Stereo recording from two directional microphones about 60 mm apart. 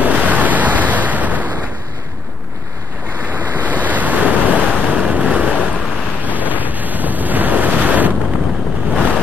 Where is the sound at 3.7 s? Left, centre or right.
Right.